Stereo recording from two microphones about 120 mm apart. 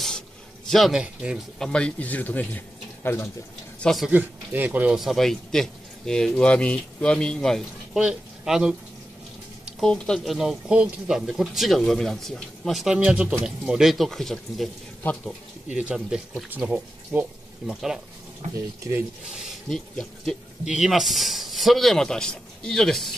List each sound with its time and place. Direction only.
0.7 s speech: centre (ahead or behind)
1.6 s speech: 10° left (ahead or behind)
3.8 s speech: centre (ahead or behind)
4.1 s speech: 15° right (ahead or behind)
4.9 s speech: centre (ahead or behind)
15.7 s speech: 10° right (ahead or behind)
19.2 s speech: 5° right (ahead or behind)